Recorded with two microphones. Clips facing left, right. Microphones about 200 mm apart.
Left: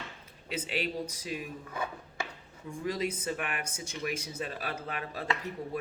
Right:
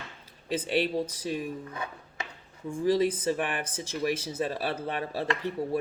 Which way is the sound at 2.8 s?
30° right (ahead or behind).